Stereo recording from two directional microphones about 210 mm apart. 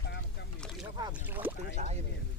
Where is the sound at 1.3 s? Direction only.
10° right (ahead or behind).